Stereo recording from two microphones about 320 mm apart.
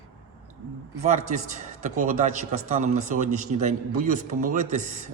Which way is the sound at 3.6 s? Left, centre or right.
Right.